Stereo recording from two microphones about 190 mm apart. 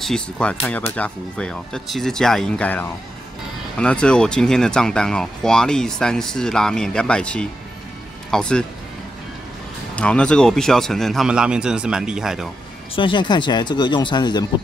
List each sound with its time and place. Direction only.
0.0 s speech: 5° left (ahead or behind)
9.9 s speech: 5° left (ahead or behind)
12.9 s speech: 25° left (ahead or behind)